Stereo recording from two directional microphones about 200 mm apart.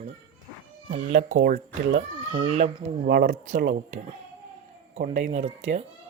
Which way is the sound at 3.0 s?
50° right (ahead or behind).